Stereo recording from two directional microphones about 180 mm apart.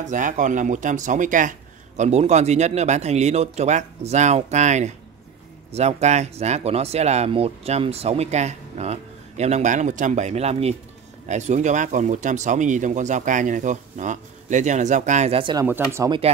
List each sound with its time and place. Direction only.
0.0 s speech: 45° right (ahead or behind); by 15.6 s 30° right (ahead or behind)
15.6 s speech: 15° right (ahead or behind)